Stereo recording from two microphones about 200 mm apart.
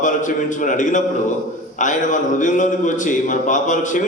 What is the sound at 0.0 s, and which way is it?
A man's voice, 40° left (ahead or behind).